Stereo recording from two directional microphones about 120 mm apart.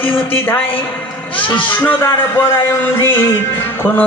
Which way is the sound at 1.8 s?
15° left (ahead or behind).